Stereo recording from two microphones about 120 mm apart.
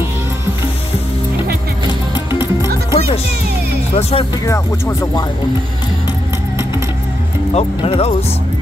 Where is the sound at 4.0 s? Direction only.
60° left (ahead or behind).